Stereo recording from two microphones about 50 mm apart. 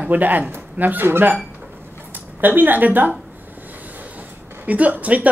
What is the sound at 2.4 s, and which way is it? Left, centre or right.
Speech, right.